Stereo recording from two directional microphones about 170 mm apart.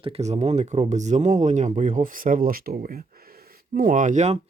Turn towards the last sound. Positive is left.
turn(degrees=-45)  # may be behind; listen again after turning